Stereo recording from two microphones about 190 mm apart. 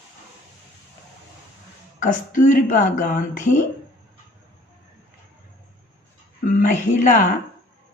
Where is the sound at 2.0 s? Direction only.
45° left (ahead or behind).